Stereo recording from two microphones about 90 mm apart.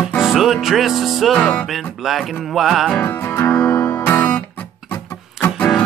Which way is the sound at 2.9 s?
25° left (ahead or behind).